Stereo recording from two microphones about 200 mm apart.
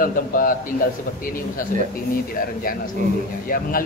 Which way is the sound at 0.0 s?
45° left (ahead or behind).